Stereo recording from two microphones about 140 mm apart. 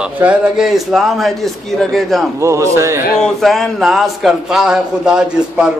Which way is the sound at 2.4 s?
20° right (ahead or behind).